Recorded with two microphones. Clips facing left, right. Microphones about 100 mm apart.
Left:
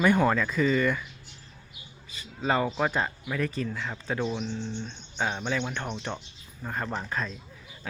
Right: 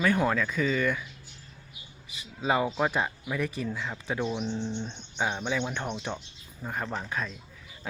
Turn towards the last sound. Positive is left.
turn(degrees=0)  # may be behind; listen again after turning